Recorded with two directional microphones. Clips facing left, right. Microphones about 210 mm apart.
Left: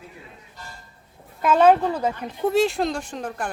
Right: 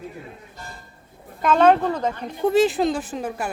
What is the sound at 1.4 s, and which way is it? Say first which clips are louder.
Speech: even; 5° left (ahead or behind).